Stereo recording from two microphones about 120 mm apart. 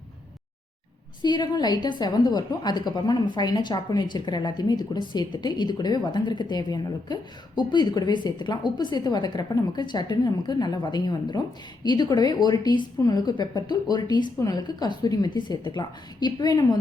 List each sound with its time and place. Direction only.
1.2 s a woman's voice: 35° left (ahead or behind)